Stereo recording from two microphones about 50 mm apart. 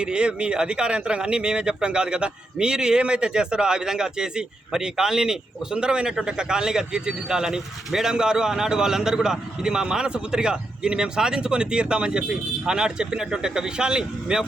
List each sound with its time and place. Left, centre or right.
0.0 s speech: centre